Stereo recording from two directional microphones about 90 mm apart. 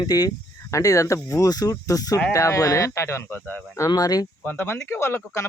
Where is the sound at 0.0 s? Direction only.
45° left (ahead or behind); by 3.6 s 20° left (ahead or behind).